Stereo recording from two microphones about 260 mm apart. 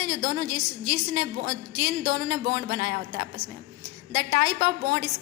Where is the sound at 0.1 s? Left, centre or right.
Right.